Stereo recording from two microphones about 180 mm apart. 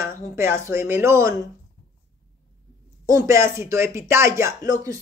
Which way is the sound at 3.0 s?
20° right (ahead or behind).